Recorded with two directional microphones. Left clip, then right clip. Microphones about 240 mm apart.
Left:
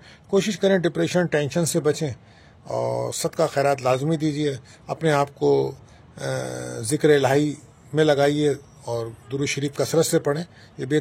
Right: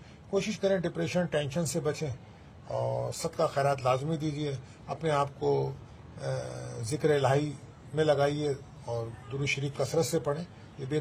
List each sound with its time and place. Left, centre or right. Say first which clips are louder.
0.3 s a man's voice: left 8 dB; left